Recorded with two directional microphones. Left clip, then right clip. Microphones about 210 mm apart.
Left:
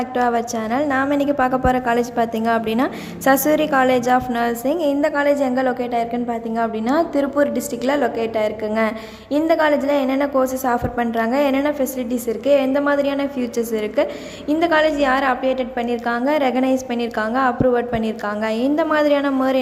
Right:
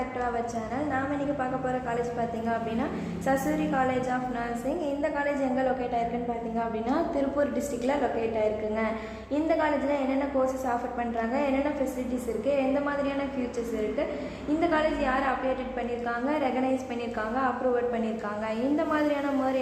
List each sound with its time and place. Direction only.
0.7 s a woman's voice: 40° left (ahead or behind)
14.6 s a woman's voice: 35° left (ahead or behind)